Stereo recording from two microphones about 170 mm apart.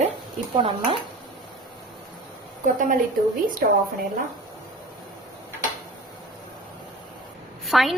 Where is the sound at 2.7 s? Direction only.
50° right (ahead or behind).